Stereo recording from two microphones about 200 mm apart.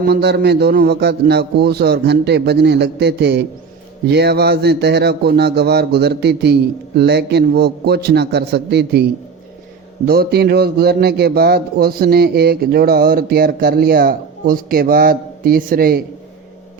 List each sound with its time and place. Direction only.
0.0 s a man's voice: 55° right (ahead or behind)
10.1 s a man's voice: 50° right (ahead or behind)